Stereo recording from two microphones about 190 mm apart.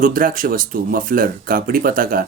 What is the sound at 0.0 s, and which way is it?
Speech, 45° right (ahead or behind).